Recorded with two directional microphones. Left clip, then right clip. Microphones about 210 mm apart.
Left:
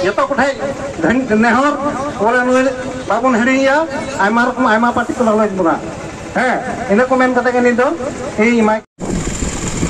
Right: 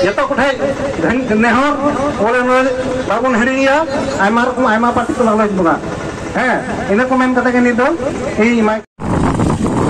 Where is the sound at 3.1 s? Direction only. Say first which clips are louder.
Left 2 dB; 45° right (ahead or behind).